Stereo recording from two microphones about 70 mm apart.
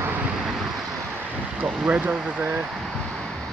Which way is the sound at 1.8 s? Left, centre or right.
Centre.